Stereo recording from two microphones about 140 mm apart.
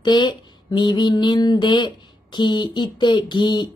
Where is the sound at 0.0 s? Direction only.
30° left (ahead or behind).